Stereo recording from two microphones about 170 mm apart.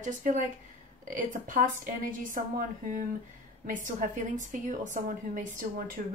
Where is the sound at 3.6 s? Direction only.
50° right (ahead or behind).